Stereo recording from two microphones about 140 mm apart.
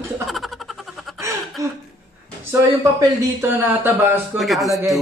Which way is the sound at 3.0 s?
15° right (ahead or behind).